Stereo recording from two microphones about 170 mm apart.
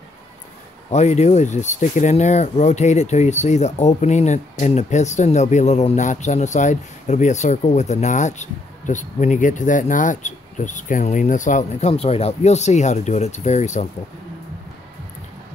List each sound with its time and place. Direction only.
0.8 s speech: 40° left (ahead or behind)
11.9 s speech: 35° left (ahead or behind)